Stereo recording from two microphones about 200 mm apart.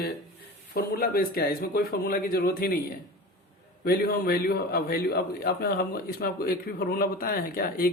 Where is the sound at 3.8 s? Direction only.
50° left (ahead or behind).